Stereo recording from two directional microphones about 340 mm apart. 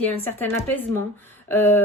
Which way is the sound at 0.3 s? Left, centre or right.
Centre.